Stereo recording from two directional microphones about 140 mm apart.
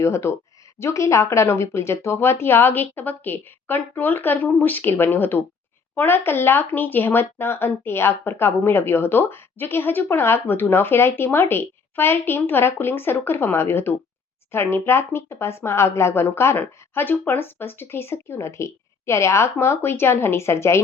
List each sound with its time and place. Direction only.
0.0 s speech: 20° left (ahead or behind)